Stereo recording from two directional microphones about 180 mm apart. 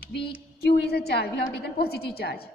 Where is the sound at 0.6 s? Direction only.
65° left (ahead or behind).